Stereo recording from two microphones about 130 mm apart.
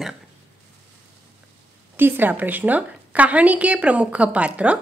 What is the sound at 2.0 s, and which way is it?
A woman's voice, 15° right (ahead or behind).